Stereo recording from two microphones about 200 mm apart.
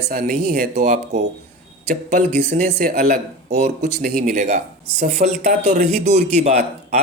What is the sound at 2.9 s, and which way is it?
A man's voice, 40° right (ahead or behind).